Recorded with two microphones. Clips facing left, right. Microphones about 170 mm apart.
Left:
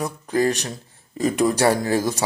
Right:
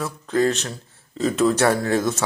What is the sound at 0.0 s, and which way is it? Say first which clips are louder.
Speech: even; 15° left (ahead or behind).